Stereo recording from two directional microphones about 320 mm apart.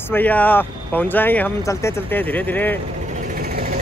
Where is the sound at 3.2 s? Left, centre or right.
Right.